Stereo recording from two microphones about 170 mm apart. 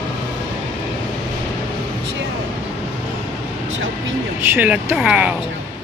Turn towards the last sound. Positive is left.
turn(degrees=-5)  # may be behind; listen again after turning